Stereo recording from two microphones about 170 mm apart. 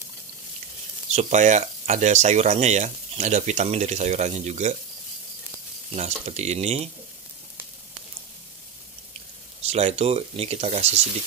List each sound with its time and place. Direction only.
1.1 s speech: 45° right (ahead or behind)
5.9 s speech: 40° right (ahead or behind)
9.6 s speech: 40° right (ahead or behind)